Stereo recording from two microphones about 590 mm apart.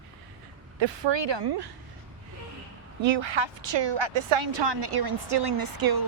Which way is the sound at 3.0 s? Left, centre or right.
Right.